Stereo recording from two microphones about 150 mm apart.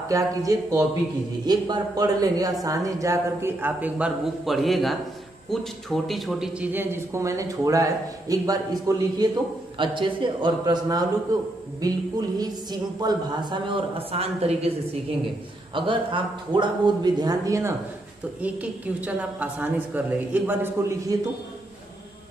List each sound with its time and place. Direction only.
0.1 s speech: 20° right (ahead or behind)
4.5 s a man's voice: centre (ahead or behind); by 9.3 s 25° right (ahead or behind)
9.8 s speech: 35° right (ahead or behind)
15.7 s speech: 35° right (ahead or behind)
18.4 s a man's voice: 10° right (ahead or behind)